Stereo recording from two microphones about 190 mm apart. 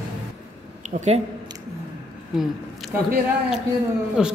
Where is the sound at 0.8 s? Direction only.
35° right (ahead or behind).